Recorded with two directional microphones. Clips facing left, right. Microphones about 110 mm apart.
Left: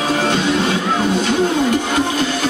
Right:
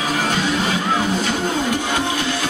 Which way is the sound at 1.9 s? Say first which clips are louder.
Left 4 dB; 45° left (ahead or behind).